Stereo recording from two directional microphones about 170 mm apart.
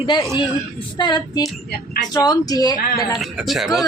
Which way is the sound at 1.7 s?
60° left (ahead or behind).